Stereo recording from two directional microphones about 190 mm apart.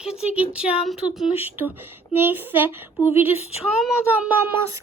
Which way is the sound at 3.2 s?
30° left (ahead or behind).